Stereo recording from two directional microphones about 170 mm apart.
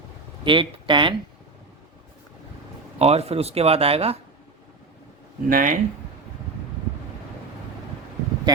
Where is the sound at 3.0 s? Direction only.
40° right (ahead or behind).